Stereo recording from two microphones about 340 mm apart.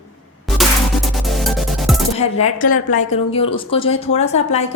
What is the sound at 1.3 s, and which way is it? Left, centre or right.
Music, centre.